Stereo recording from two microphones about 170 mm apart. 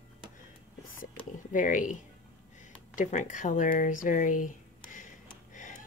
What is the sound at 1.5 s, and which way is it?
Speech, 50° left (ahead or behind).